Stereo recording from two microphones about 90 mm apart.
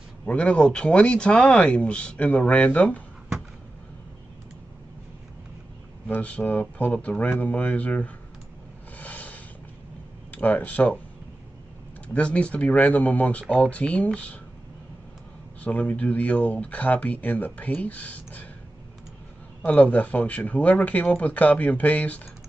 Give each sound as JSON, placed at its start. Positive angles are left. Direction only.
{"t": 0.2, "sound": "speech", "side_deg": 10}
{"t": 6.0, "sound": "speech", "side_deg": 15}
{"t": 8.9, "sound": "a sound", "side_deg": 15}
{"t": 10.3, "sound": "speech", "side_deg": 20}
{"t": 12.1, "sound": "speech", "side_deg": 15}
{"t": 15.6, "sound": "speech", "side_deg": 15}
{"t": 19.6, "sound": "speech", "side_deg": 15}